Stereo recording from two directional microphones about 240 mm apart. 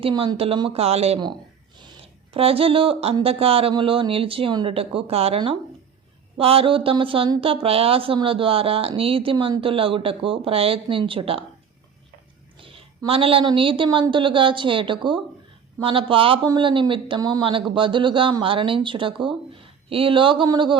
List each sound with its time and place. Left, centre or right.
0.0 s a woman's voice: centre
2.3 s a woman's voice: right
12.5 s a woman's voice: right